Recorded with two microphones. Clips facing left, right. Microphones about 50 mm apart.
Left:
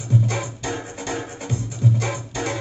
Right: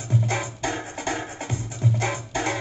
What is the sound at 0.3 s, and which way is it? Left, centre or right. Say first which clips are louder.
Music: even; right.